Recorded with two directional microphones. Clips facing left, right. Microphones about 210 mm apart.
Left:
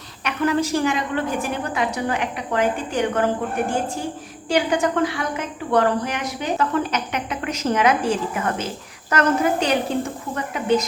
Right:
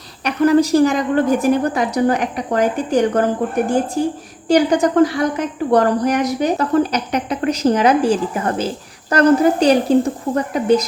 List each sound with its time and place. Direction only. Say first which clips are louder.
0.3 s a woman's voice: right 8 dB; 40° right (ahead or behind)